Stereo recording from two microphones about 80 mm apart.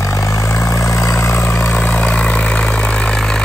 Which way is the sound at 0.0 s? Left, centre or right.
Left.